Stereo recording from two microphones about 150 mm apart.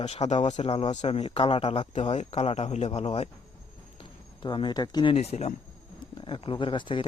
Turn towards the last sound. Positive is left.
turn(degrees=35)  # may be behind; listen again after turning